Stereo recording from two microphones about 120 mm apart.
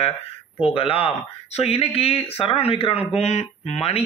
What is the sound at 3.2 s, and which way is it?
Speech, 65° left (ahead or behind).